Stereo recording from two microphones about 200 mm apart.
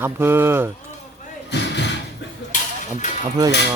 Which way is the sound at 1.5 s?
60° left (ahead or behind).